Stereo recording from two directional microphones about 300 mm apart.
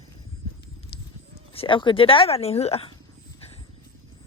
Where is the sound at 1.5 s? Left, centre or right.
Centre.